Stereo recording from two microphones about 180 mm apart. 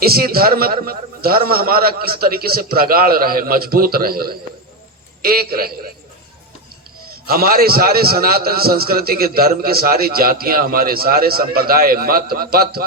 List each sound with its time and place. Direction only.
0.0 s a man's voice: 60° right (ahead or behind)
7.3 s a man's voice: 55° right (ahead or behind)